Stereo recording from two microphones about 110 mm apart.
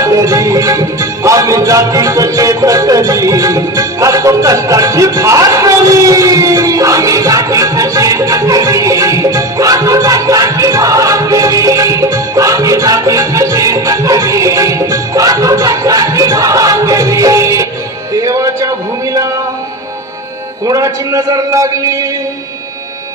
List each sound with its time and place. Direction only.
0.0 s music: 30° right (ahead or behind)
18.1 s a sound: 30° right (ahead or behind)
20.6 s a man's voice: 35° right (ahead or behind)